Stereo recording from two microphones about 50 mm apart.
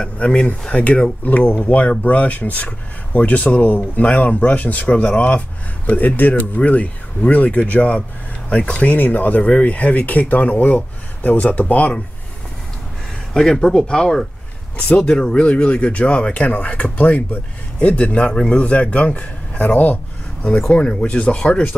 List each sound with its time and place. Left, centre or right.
0.0 s speech: centre
5.9 s speech: left
13.3 s speech: centre